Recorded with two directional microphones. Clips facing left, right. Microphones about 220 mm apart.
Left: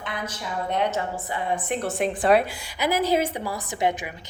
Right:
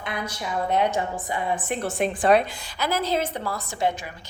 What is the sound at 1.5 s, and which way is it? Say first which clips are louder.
A woman's voice: even; centre (ahead or behind).